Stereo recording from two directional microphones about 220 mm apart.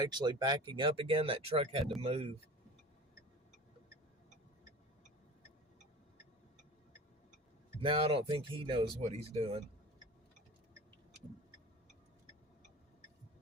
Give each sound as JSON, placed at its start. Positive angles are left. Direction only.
{"t": 0.0, "sound": "speech", "side_deg": -20}
{"t": 7.8, "sound": "speech", "side_deg": -25}